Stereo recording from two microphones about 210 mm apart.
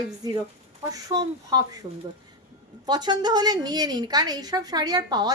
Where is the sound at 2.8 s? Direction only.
20° right (ahead or behind).